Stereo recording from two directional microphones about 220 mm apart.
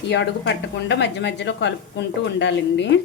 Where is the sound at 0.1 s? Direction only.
55° left (ahead or behind).